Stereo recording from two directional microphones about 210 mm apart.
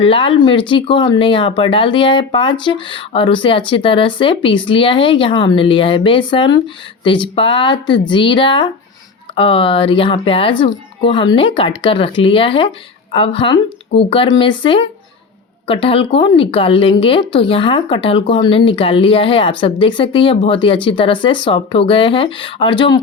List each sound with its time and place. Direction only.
0.0 s speech: 25° left (ahead or behind)